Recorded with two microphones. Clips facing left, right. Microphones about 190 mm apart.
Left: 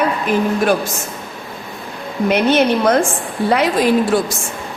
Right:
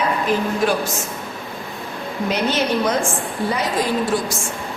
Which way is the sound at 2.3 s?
60° left (ahead or behind).